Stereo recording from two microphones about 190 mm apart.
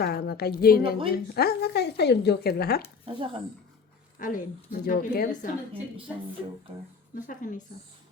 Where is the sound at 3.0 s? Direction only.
25° right (ahead or behind).